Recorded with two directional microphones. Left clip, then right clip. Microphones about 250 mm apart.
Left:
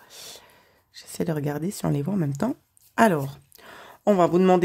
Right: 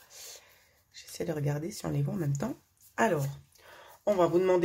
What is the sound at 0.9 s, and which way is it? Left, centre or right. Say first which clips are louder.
Speech: left 6 dB; left.